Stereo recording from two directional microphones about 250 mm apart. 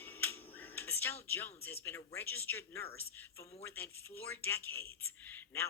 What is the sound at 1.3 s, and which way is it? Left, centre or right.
Speech, centre.